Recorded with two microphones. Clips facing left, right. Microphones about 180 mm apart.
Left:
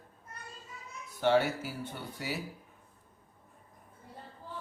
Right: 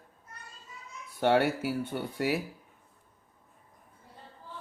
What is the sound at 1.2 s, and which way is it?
Speech, 60° right (ahead or behind).